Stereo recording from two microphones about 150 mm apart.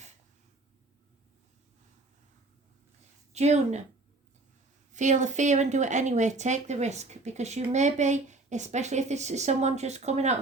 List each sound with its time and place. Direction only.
3.3 s speech: 45° right (ahead or behind)
4.9 s speech: 55° right (ahead or behind)